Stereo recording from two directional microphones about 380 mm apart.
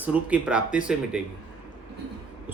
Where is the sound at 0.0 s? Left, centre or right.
Centre.